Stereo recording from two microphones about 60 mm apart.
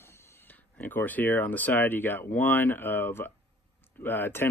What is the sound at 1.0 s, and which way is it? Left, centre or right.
Speech, left.